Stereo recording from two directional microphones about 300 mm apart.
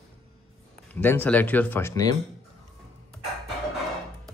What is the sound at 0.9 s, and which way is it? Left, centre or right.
A man's voice, centre.